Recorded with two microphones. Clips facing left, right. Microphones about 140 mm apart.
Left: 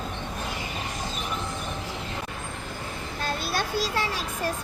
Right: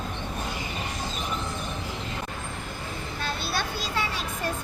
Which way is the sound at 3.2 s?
45° left (ahead or behind).